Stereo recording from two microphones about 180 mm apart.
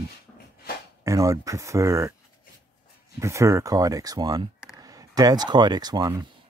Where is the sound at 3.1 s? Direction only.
15° right (ahead or behind).